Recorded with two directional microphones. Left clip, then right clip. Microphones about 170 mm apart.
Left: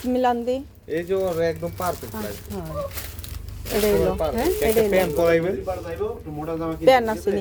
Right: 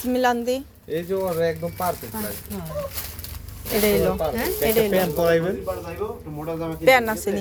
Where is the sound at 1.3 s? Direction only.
Centre (ahead or behind).